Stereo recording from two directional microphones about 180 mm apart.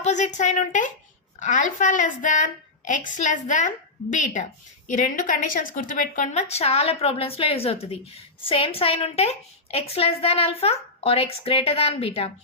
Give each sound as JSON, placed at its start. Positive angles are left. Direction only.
{"t": 0.0, "sound": "a woman's voice", "side_deg": 40}